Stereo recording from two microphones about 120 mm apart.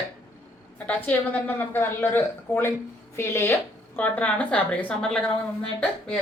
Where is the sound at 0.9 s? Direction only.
15° left (ahead or behind).